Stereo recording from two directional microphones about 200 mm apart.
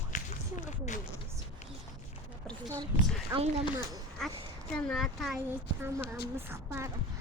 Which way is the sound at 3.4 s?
30° right (ahead or behind).